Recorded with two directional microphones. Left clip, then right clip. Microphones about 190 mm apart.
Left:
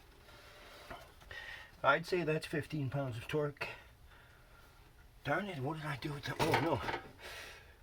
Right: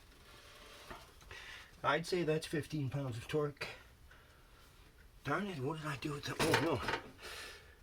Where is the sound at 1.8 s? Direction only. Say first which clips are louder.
Left 3 dB; 30° left (ahead or behind).